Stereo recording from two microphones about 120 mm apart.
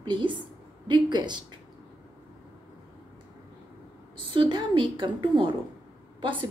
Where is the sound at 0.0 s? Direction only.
40° right (ahead or behind).